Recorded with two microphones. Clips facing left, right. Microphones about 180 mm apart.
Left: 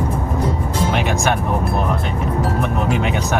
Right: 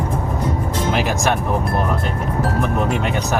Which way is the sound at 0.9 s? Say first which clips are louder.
Right 1 dB; centre (ahead or behind).